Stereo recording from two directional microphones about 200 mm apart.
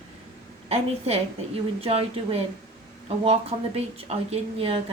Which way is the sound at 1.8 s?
30° right (ahead or behind).